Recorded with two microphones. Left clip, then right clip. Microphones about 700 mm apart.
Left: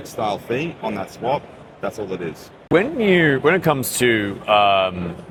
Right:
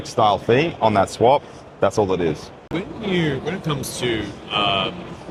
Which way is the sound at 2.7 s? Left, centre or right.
Left.